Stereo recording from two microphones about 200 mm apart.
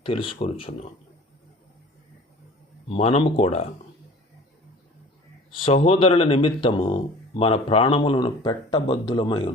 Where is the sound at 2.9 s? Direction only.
30° left (ahead or behind).